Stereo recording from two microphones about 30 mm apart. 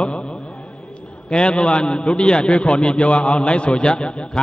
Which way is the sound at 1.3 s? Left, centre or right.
Left.